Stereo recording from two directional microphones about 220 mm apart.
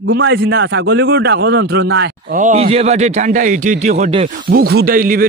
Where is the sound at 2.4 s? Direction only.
30° right (ahead or behind).